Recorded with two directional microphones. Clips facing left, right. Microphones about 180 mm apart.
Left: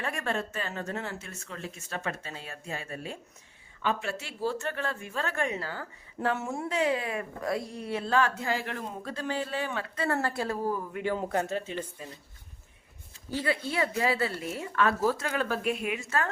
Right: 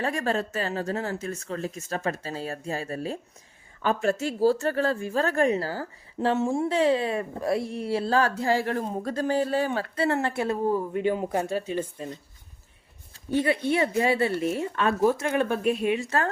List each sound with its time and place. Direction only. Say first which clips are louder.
0.0 s a woman's voice: right 5 dB; 35° right (ahead or behind); by 11.5 s 15° right (ahead or behind)
11.8 s speech: right 7 dB; 30° right (ahead or behind)
13.3 s a woman's voice: right 6 dB; 25° right (ahead or behind)